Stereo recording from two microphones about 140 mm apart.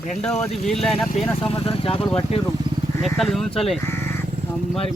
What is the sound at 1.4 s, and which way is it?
Speech, 40° left (ahead or behind).